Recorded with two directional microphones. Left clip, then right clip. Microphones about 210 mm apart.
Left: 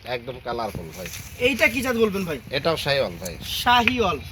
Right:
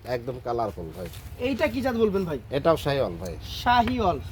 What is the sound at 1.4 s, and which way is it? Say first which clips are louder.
Speech: left 5 dB; 50° right (ahead or behind).